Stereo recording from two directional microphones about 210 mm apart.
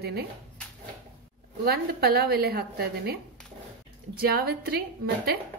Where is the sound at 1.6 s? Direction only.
45° right (ahead or behind).